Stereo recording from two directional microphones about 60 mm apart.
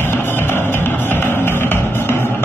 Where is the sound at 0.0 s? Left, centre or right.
Left.